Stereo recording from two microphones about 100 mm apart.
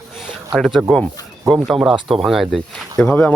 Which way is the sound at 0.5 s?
Centre (ahead or behind).